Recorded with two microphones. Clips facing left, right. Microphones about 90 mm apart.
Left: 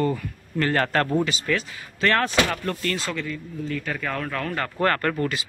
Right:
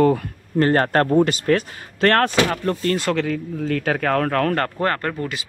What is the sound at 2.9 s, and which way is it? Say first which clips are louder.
Speech: right 8 dB; 65° right (ahead or behind).